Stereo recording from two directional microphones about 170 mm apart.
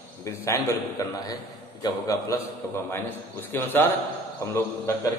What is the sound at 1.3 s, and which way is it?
A man's voice, 20° left (ahead or behind).